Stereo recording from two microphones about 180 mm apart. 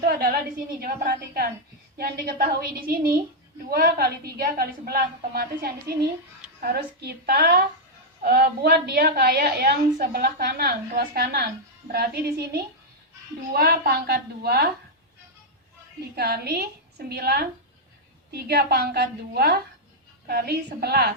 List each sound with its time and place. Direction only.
0.0 s a woman's voice: 60° right (ahead or behind)
16.1 s a woman's voice: 60° right (ahead or behind)